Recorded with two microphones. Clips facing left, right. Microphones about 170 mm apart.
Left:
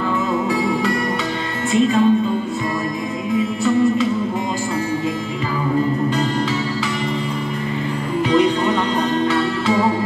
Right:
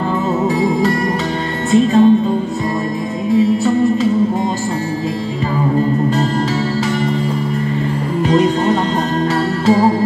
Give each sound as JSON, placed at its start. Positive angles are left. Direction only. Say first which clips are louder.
{"t": 1.7, "sound": "music", "louder": "right 5 dB", "side_deg": -40}
{"t": 3.3, "sound": "music", "louder": "right 4 dB", "side_deg": -40}
{"t": 8.3, "sound": "music", "louder": "right 3 dB", "side_deg": -40}